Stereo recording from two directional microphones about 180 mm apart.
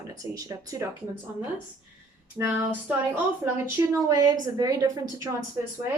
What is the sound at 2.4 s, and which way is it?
A woman's voice, 10° right (ahead or behind).